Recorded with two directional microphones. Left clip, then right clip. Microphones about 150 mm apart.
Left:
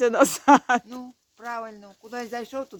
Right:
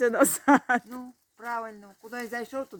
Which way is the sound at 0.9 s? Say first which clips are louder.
Left 2 dB; 30° left (ahead or behind).